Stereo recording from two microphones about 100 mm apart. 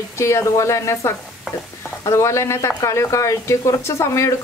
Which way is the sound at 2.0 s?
30° left (ahead or behind).